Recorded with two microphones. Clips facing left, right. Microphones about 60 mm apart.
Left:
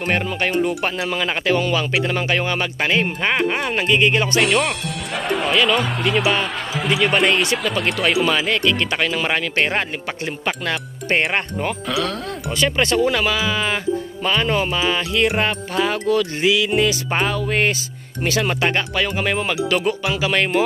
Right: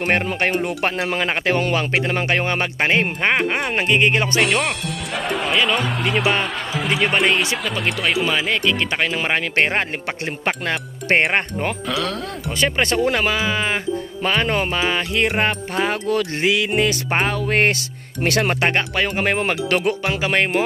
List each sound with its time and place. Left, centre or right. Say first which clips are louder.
0.0 s speech: right 1 dB; right
4.4 s speech: left 1 dB; centre; by 10.7 s right
11.9 s speech: left 2 dB; centre
12.6 s speech: left 1 dB; right
18.6 s speech: right 1 dB; right